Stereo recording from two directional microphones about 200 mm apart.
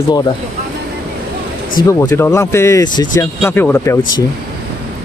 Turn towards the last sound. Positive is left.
turn(degrees=15)  # may be behind; listen again after turning